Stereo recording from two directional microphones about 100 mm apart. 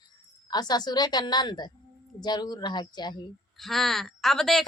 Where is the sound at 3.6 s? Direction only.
Centre (ahead or behind).